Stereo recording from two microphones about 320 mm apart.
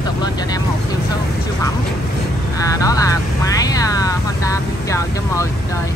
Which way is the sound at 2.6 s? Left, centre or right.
Centre.